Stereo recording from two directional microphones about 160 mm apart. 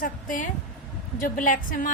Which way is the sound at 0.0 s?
55° left (ahead or behind).